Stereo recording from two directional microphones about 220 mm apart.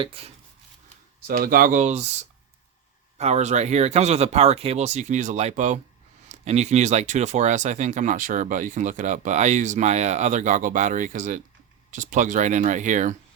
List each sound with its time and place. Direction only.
0.0 s speech: 25° right (ahead or behind)
1.3 s speech: 40° right (ahead or behind)
3.2 s speech: 30° right (ahead or behind)